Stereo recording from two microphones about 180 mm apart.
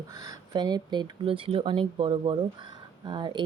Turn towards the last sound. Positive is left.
turn(degrees=-25)  # may be behind; listen again after turning